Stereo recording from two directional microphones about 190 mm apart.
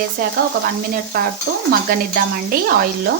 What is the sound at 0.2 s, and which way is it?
Speech, 50° right (ahead or behind).